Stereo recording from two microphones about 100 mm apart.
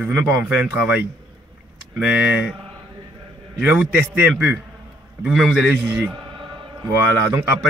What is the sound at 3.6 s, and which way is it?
Speech, 10° right (ahead or behind).